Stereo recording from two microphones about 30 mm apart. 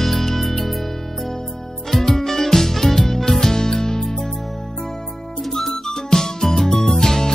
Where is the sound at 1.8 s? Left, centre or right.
Centre.